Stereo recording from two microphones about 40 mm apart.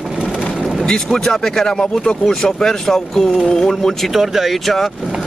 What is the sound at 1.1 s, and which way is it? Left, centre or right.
Speech, centre.